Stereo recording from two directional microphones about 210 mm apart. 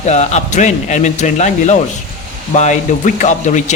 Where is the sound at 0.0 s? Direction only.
30° left (ahead or behind).